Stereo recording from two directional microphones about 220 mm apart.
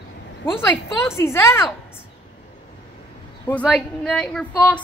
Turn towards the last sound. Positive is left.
turn(degrees=10)  # may be behind; listen again after turning